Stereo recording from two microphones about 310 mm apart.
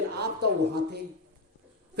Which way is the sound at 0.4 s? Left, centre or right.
Right.